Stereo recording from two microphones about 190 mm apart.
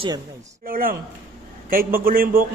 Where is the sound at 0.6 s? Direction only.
50° right (ahead or behind).